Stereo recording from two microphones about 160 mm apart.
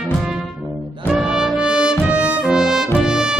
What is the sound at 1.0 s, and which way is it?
Trumpet, 5° right (ahead or behind).